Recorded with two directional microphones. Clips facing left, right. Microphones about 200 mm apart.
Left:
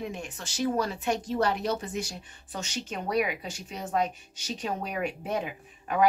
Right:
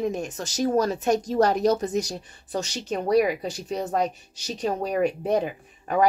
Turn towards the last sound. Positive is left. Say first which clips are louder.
# right 5 dB
turn(degrees=-40)  # may be behind; listen again after turning